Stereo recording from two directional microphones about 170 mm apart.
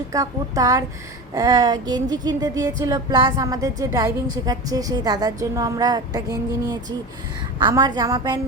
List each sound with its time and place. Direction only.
0.1 s speech: 20° right (ahead or behind)